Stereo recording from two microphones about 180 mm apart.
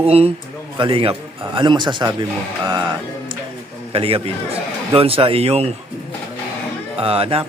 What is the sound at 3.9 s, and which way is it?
A man's voice, 30° right (ahead or behind).